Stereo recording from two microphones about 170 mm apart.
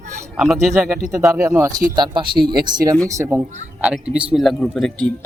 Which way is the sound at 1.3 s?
15° right (ahead or behind).